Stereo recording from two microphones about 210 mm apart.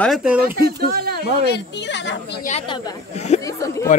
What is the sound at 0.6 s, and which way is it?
Speech, 45° right (ahead or behind).